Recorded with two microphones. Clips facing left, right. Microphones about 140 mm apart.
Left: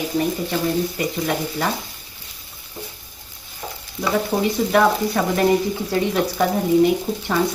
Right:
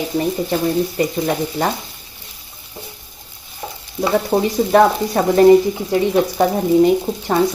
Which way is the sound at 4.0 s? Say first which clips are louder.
Right 4 dB; 25° right (ahead or behind).